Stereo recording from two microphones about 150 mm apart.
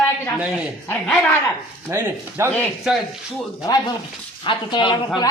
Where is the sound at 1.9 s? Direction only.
15° right (ahead or behind).